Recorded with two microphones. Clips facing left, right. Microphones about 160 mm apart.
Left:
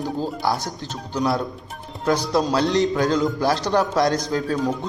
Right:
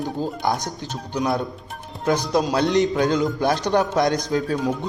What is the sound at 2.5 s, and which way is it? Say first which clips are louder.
A man's voice: right 1 dB; 20° right (ahead or behind).